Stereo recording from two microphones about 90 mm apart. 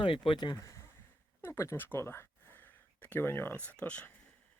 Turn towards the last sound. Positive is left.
turn(degrees=15)  # may be behind; listen again after turning